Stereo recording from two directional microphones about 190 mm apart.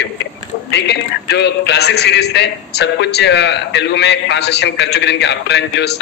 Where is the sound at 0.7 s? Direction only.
60° left (ahead or behind).